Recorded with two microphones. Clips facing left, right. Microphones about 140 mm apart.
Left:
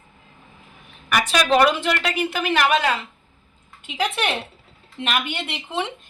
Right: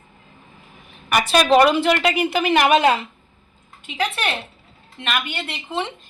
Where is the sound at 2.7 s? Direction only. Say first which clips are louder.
Right 5 dB; 30° right (ahead or behind).